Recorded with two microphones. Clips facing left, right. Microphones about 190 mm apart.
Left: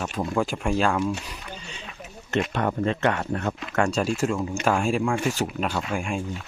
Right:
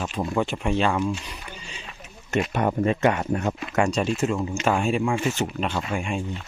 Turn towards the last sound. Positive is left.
turn(degrees=0)  # may be behind; listen again after turning